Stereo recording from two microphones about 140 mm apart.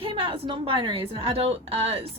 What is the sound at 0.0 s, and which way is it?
A woman's voice, 35° right (ahead or behind).